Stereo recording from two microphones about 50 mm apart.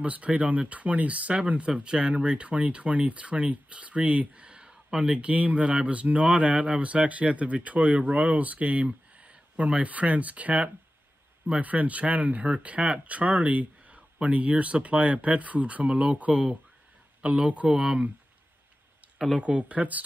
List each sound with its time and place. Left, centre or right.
0.0 s speech: right
19.3 s speech: right